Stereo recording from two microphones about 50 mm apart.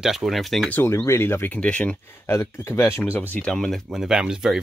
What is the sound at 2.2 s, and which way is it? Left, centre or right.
Speech, left.